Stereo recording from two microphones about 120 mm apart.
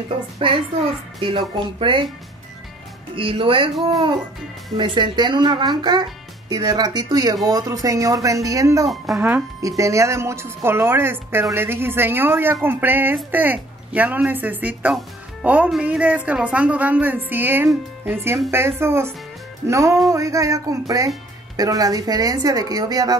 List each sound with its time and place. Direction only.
0.4 s speech: 45° right (ahead or behind)
3.2 s a woman's voice: 45° right (ahead or behind); by 8.8 s 30° right (ahead or behind)
8.8 s speech: centre (ahead or behind)
9.6 s a woman's voice: 25° right (ahead or behind)